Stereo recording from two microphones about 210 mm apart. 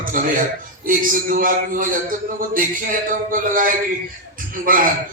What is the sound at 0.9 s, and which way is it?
A man's voice, 40° right (ahead or behind).